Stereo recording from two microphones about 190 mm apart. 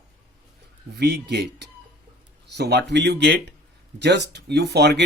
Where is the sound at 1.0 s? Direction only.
65° right (ahead or behind).